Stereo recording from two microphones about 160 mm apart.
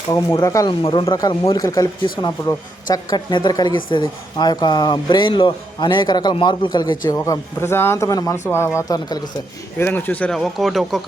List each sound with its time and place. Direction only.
0.1 s speech: 25° left (ahead or behind)
0.7 s speech: 30° left (ahead or behind)
2.9 s speech: 25° left (ahead or behind); by 11.0 s centre (ahead or behind)